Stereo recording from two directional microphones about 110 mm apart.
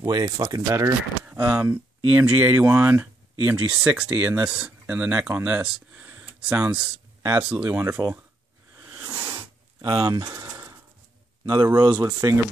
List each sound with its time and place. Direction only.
0.0 s speech: 40° right (ahead or behind); by 8.0 s 15° right (ahead or behind)
9.3 s a sound: 35° right (ahead or behind)
11.4 s speech: 35° right (ahead or behind)